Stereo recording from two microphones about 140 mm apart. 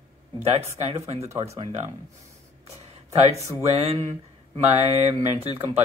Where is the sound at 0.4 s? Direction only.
50° right (ahead or behind).